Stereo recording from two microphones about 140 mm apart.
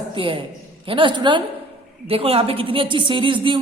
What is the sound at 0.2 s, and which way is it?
A woman's voice, 35° right (ahead or behind).